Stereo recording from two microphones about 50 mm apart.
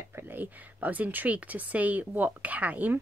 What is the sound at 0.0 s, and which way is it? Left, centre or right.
Speech, right.